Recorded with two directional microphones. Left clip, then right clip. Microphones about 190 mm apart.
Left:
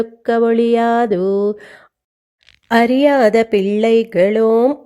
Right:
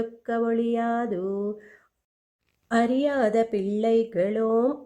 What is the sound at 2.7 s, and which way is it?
Speech, 30° left (ahead or behind).